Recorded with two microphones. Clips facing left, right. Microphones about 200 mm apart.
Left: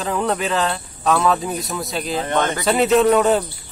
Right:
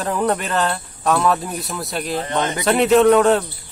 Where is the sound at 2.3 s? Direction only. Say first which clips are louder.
Left 3 dB; 50° left (ahead or behind).